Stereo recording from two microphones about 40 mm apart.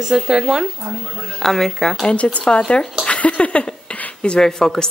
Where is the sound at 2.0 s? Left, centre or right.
Left.